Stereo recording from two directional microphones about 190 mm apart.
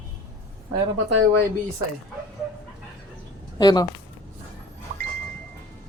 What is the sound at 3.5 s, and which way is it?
Speech, 20° left (ahead or behind).